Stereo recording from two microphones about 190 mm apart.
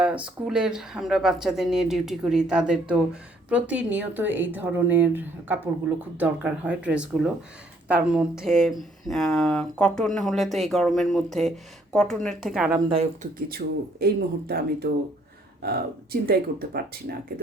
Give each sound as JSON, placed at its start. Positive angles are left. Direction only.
{"t": 0.0, "sound": "speech", "side_deg": -5}
{"t": 13.6, "sound": "speech", "side_deg": -55}
{"t": 16.2, "sound": "speech", "side_deg": -55}